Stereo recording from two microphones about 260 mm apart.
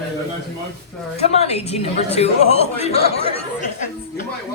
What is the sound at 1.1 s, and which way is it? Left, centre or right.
A woman's voice, left.